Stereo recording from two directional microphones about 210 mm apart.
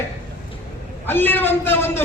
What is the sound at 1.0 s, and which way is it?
A man's voice, 10° left (ahead or behind).